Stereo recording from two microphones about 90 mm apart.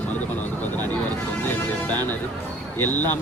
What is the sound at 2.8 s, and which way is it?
Speech, 20° left (ahead or behind).